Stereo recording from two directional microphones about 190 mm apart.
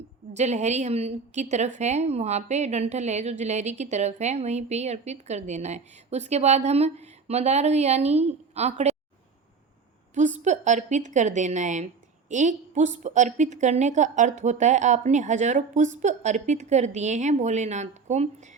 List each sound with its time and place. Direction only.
0.3 s a woman's voice: 35° right (ahead or behind)
10.2 s a woman's voice: 40° right (ahead or behind)